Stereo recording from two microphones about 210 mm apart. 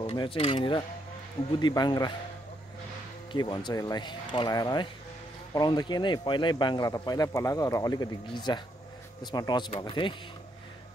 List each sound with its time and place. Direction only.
0.0 s speech: 25° left (ahead or behind)
3.3 s speech: 20° left (ahead or behind)